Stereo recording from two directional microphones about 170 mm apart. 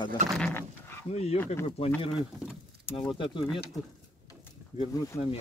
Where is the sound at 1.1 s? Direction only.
40° left (ahead or behind).